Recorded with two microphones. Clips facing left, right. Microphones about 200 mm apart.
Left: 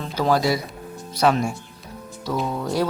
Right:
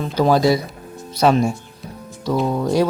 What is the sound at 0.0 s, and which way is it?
Speech, 20° right (ahead or behind).